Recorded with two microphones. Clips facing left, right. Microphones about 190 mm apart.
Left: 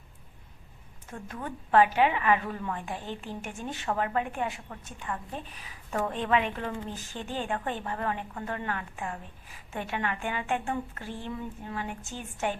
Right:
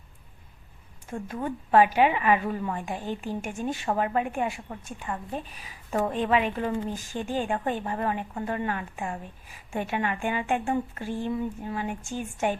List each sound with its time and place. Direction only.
1.1 s a woman's voice: 25° right (ahead or behind)
1.5 s a woman's voice: 15° right (ahead or behind)